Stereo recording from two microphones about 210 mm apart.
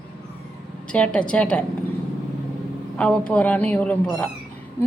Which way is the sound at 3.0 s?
5° left (ahead or behind).